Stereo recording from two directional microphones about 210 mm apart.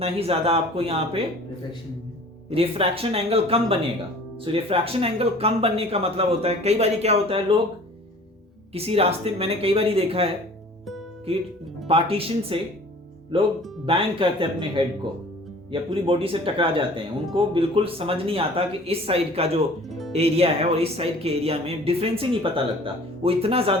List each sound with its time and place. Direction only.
0.0 s speech: 30° right (ahead or behind)
2.5 s speech: 25° right (ahead or behind)
8.7 s speech: 30° right (ahead or behind)
11.9 s speech: 25° right (ahead or behind)